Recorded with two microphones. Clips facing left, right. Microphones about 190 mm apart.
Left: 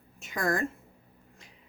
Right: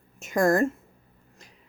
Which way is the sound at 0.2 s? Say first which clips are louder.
Right 8 dB; 45° right (ahead or behind).